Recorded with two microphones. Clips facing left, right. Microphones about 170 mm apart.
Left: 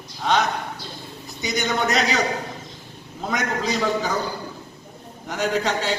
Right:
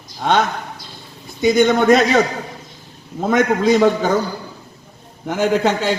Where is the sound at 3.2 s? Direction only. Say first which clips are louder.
Right 10 dB; 50° right (ahead or behind).